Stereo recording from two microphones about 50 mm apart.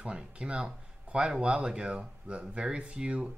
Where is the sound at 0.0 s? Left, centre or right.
Right.